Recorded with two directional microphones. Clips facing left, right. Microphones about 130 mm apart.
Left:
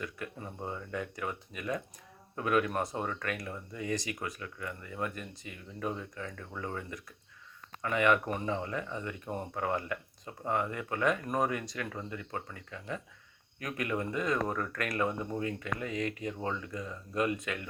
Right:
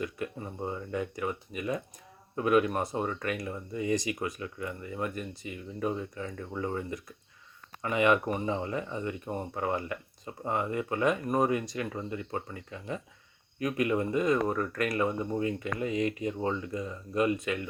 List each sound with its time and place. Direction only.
0.0 s speech: 10° right (ahead or behind)